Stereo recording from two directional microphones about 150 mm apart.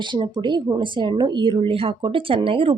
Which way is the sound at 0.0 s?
30° right (ahead or behind).